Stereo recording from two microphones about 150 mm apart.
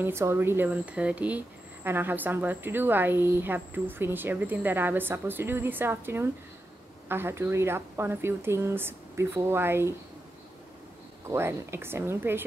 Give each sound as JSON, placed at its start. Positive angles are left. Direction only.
{"t": 0.0, "sound": "speech", "side_deg": -15}
{"t": 11.2, "sound": "speech", "side_deg": -15}